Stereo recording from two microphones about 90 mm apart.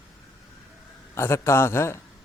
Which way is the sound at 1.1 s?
30° left (ahead or behind).